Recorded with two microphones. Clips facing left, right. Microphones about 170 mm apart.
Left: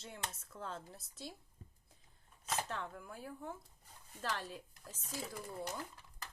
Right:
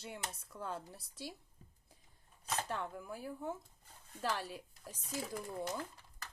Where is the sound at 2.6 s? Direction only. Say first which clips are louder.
Right 3 dB; 15° right (ahead or behind).